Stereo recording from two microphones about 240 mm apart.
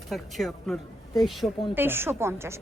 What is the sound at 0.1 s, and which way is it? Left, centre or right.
Speech, centre.